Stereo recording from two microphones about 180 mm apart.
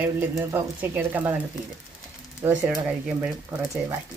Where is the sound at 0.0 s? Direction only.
10° right (ahead or behind).